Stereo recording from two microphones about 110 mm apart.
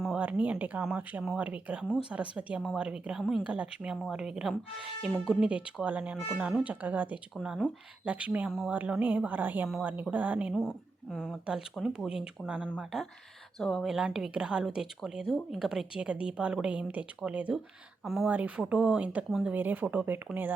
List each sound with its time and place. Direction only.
0.2 s speech: 15° right (ahead or behind)
10.5 s a woman's voice: 5° left (ahead or behind)
13.6 s a woman's voice: 5° left (ahead or behind); by 17.6 s 10° right (ahead or behind)
18.0 s speech: centre (ahead or behind)
18.3 s speech: 15° right (ahead or behind)